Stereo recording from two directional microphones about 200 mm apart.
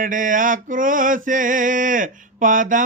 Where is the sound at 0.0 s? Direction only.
40° right (ahead or behind).